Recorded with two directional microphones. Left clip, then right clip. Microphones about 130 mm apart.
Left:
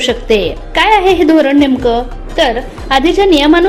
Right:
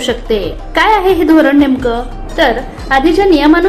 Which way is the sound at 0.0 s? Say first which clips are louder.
Left 3 dB; 35° left (ahead or behind).